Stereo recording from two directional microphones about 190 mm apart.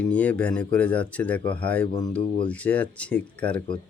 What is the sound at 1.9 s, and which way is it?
Speech, 20° left (ahead or behind).